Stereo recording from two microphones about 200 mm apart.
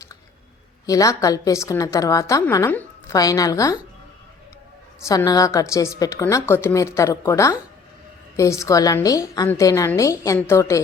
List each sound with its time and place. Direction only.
0.9 s a woman's voice: 15° left (ahead or behind)
5.0 s a woman's voice: 15° left (ahead or behind)